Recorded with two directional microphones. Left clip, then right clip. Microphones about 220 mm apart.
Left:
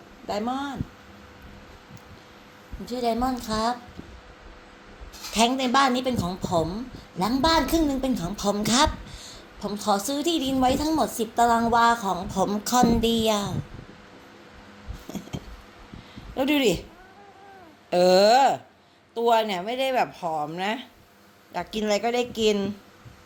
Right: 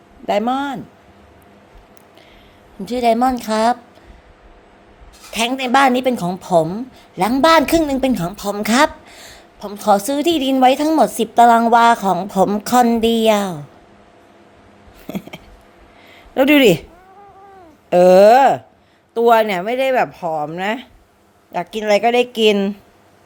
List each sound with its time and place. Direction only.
0.3 s a woman's voice: 45° right (ahead or behind)
2.8 s a woman's voice: 45° right (ahead or behind)
5.3 s a woman's voice: 35° right (ahead or behind)
15.1 s a sound: 40° right (ahead or behind)
16.3 s speech: 40° right (ahead or behind)
17.8 s speech: 30° right (ahead or behind)